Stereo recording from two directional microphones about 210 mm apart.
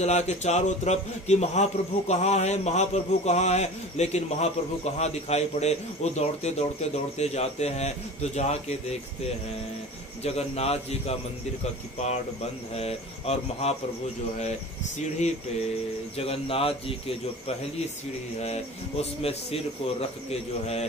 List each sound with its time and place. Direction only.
0.0 s a man's voice: 35° left (ahead or behind)
10.2 s speech: 30° left (ahead or behind)
15.0 s a man's voice: 30° left (ahead or behind)
18.4 s speech: 30° left (ahead or behind)